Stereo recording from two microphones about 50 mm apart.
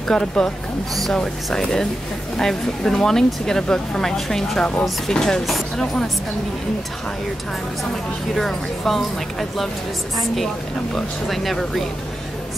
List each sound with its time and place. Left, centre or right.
0.1 s speech: centre
8.4 s speech: centre